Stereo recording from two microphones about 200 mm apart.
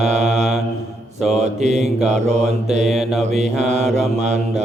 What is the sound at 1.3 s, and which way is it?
Mantra, 35° right (ahead or behind).